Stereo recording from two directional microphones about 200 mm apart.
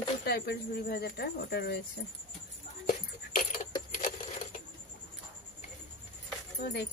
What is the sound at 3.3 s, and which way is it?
Coin, 40° left (ahead or behind).